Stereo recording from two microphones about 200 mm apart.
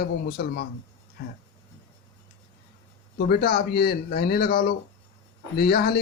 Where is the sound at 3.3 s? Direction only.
50° left (ahead or behind).